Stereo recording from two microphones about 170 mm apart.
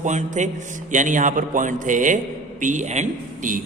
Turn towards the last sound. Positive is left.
turn(degrees=-50)  # may be behind; listen again after turning